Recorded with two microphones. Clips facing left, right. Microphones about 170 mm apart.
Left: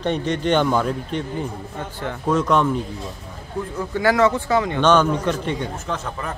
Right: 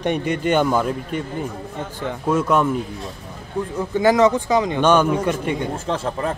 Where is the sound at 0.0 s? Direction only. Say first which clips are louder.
Right 1 dB; 10° right (ahead or behind).